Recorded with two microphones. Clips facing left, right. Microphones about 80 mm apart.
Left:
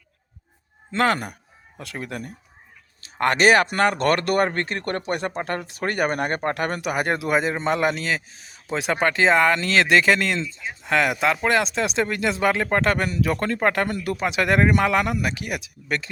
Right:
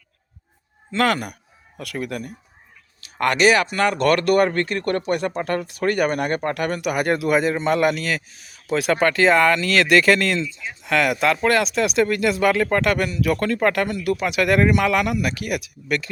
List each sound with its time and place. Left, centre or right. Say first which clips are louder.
0.9 s a man's voice: right 1 dB; left
6.9 s a man's voice: right 3 dB; left